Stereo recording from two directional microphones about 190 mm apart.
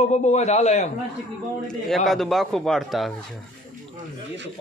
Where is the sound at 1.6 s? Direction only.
Centre (ahead or behind).